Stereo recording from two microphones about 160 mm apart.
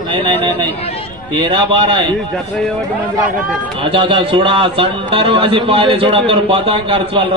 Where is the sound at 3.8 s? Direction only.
35° right (ahead or behind).